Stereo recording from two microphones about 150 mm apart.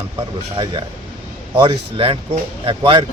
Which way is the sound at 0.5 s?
35° right (ahead or behind).